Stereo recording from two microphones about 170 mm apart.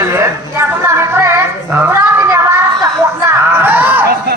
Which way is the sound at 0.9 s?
15° right (ahead or behind).